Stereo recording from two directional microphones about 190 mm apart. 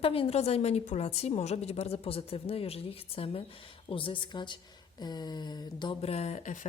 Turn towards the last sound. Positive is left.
turn(degrees=40)  # may be behind; listen again after turning